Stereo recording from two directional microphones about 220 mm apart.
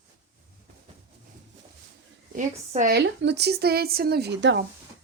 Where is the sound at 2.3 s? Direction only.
40° right (ahead or behind).